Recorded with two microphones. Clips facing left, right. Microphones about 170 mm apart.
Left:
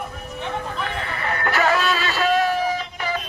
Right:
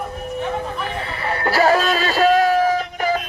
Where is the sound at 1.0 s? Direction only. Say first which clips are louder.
Right 2 dB; 25° right (ahead or behind).